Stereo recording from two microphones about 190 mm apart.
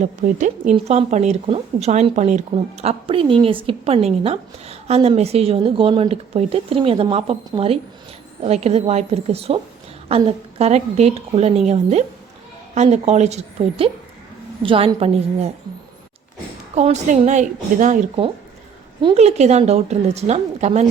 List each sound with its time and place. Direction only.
0.0 s a woman's voice: 40° right (ahead or behind)
16.7 s a woman's voice: 35° right (ahead or behind)
19.0 s a woman's voice: 35° right (ahead or behind)